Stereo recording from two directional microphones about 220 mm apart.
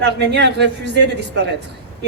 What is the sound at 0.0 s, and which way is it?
A woman's voice, 50° right (ahead or behind).